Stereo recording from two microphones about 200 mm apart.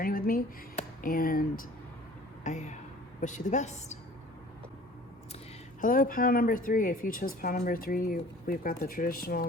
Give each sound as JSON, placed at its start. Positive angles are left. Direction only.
{"t": 0.0, "sound": "speech", "side_deg": 45}
{"t": 2.4, "sound": "a sound", "side_deg": 35}
{"t": 3.2, "sound": "a woman's voice", "side_deg": 35}
{"t": 5.8, "sound": "speech", "side_deg": 45}